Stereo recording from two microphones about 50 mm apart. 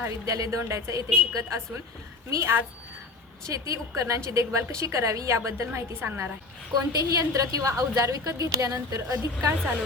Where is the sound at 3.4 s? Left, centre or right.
Right.